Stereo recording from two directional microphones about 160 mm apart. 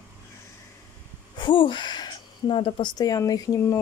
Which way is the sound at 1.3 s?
30° left (ahead or behind).